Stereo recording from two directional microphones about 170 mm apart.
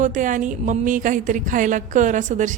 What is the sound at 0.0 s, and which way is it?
A woman's voice, 50° right (ahead or behind).